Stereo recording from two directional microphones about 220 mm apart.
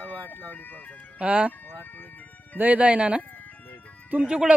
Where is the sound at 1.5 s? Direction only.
10° left (ahead or behind).